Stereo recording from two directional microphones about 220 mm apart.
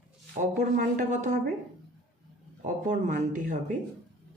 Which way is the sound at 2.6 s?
35° right (ahead or behind).